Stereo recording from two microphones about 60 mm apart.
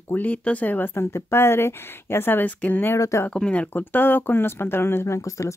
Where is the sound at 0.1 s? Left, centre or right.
Left.